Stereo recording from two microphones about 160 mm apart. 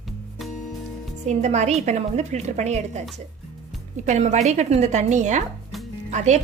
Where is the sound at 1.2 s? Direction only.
45° right (ahead or behind).